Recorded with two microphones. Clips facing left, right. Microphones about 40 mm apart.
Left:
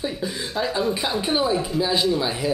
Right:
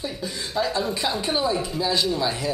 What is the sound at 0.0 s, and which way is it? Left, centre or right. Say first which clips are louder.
Speech: left 3 dB; centre.